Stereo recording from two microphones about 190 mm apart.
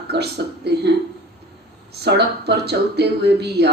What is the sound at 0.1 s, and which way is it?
Speech, 60° right (ahead or behind).